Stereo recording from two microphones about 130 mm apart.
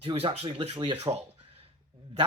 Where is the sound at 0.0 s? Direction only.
50° right (ahead or behind).